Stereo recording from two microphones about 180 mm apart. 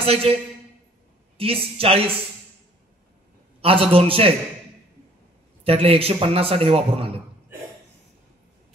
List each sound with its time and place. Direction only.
0.0 s a man's voice: 30° right (ahead or behind)
1.4 s a man's voice: 30° right (ahead or behind)
3.6 s a man's voice: 30° right (ahead or behind)
5.6 s a man's voice: 30° right (ahead or behind)